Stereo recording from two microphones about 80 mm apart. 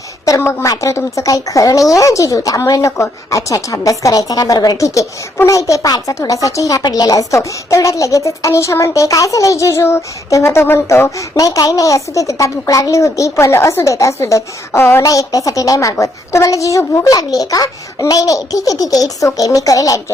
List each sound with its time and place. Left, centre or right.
0.3 s a woman's voice: left
0.7 s a woman's voice: left
11.3 s a woman's voice: left
15.0 s a woman's voice: left